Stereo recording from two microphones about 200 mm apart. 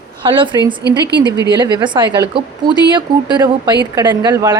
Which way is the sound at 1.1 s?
55° right (ahead or behind).